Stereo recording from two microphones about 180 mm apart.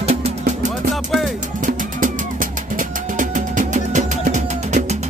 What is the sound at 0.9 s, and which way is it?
Music, centre (ahead or behind).